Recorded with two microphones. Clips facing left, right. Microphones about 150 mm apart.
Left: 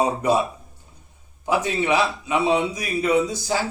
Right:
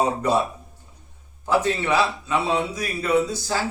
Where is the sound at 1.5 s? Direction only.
15° left (ahead or behind).